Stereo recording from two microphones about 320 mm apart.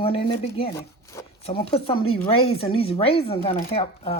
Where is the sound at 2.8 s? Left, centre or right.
Centre.